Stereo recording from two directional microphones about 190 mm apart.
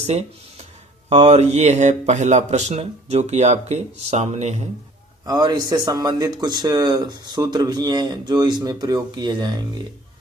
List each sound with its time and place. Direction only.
0.0 s speech: 35° right (ahead or behind)
5.2 s speech: 20° right (ahead or behind)